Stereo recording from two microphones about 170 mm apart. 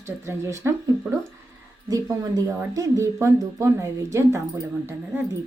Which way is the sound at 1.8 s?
20° right (ahead or behind).